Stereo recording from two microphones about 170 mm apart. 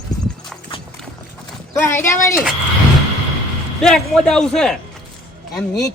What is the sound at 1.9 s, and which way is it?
Speech, 15° left (ahead or behind).